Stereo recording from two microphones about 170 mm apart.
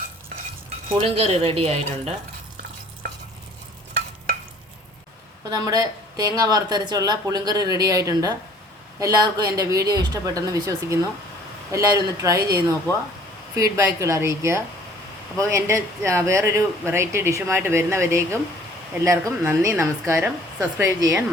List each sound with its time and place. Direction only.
0.9 s speech: 35° right (ahead or behind)
5.5 s speech: 20° right (ahead or behind)